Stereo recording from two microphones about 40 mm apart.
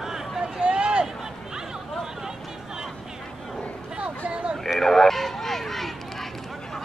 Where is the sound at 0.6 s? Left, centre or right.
Right.